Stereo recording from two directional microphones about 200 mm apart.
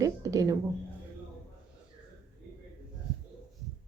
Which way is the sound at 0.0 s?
15° right (ahead or behind).